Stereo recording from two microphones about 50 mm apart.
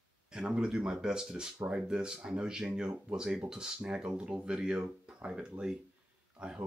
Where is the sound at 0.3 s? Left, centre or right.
Centre.